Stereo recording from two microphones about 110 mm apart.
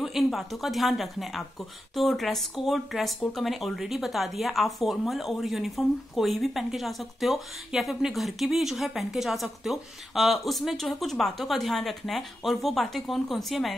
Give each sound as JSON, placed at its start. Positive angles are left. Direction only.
{"t": 0.0, "sound": "speech", "side_deg": 0}